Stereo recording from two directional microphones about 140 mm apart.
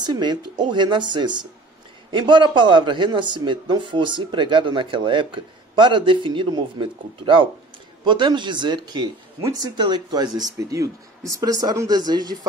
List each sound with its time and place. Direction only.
0.0 s a man's voice: 30° right (ahead or behind)